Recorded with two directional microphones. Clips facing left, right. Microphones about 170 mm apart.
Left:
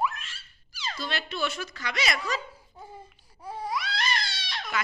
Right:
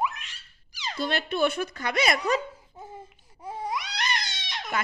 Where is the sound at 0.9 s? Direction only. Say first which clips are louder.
Right 7 dB; 55° right (ahead or behind).